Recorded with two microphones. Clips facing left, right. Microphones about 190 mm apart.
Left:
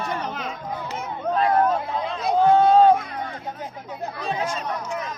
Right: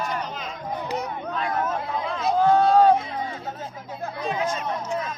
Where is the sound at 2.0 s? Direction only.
25° left (ahead or behind).